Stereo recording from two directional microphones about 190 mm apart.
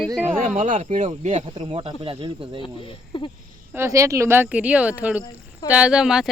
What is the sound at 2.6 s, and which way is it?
Speech, 25° left (ahead or behind).